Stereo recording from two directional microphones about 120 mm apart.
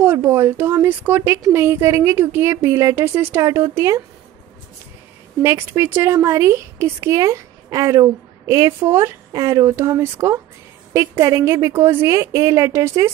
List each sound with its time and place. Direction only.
0.0 s a woman's voice: 20° right (ahead or behind)
5.4 s a woman's voice: 20° right (ahead or behind)